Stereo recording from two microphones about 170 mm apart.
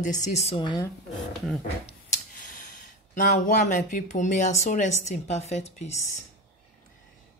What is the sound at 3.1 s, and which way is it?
Speech, 50° left (ahead or behind).